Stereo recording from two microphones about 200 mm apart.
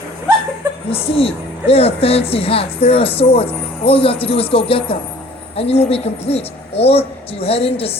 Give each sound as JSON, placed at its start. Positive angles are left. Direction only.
{"t": 1.0, "sound": "a woman's voice", "side_deg": 30}